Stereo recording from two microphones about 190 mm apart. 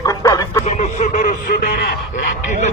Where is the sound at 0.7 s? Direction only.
40° left (ahead or behind).